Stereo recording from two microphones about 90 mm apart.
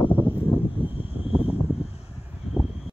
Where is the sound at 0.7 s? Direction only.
80° left.